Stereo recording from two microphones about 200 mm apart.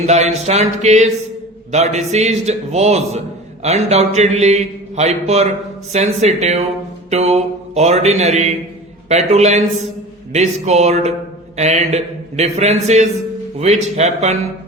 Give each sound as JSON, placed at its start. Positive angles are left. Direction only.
{"t": 0.0, "sound": "a man's voice", "side_deg": -35}